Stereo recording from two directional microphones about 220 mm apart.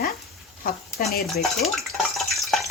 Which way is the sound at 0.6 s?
40° left (ahead or behind).